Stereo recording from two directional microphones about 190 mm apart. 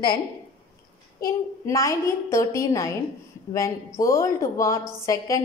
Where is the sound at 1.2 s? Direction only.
15° left (ahead or behind).